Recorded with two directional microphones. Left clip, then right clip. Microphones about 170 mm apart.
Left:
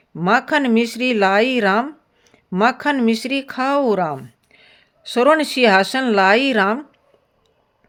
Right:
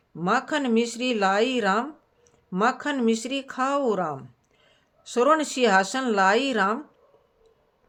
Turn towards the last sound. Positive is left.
turn(degrees=40)  # may be behind; listen again after turning